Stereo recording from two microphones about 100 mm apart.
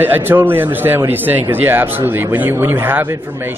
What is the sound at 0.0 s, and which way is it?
A man's voice, 20° right (ahead or behind).